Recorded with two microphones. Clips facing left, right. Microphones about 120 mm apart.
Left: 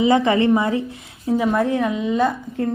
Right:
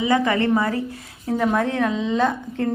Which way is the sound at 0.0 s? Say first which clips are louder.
Left 3 dB; 20° left (ahead or behind).